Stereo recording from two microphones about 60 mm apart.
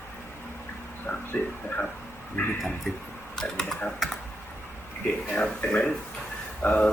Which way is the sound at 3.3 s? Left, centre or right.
Centre.